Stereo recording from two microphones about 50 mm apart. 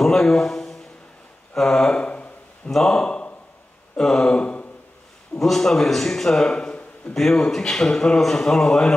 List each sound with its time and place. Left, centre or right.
0.0 s a man's voice: centre
1.5 s a sound: centre
2.7 s a man's voice: centre
5.4 s a man's voice: centre
7.2 s a man's voice: centre